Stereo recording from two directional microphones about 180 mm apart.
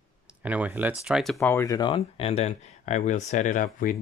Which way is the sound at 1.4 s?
15° left (ahead or behind).